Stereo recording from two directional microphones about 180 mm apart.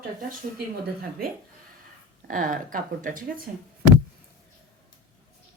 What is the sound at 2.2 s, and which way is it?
Speech, 45° right (ahead or behind).